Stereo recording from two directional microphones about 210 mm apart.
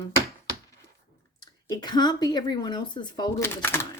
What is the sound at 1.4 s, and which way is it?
Speech, 20° left (ahead or behind).